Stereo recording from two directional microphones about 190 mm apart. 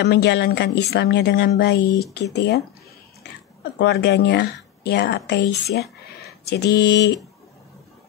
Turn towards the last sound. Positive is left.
turn(degrees=65)  # may be behind; listen again after turning